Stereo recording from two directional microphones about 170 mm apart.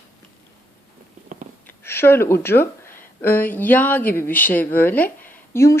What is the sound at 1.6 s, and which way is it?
A woman's voice, 15° left (ahead or behind).